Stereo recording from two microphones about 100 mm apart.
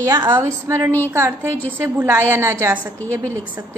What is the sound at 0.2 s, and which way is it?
A woman's voice, 25° right (ahead or behind).